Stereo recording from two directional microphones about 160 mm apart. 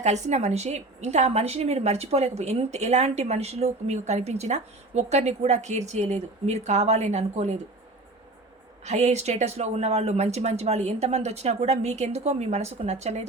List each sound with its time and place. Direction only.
0.0 s a woman's voice: 45° right (ahead or behind)
8.8 s a woman's voice: 45° right (ahead or behind)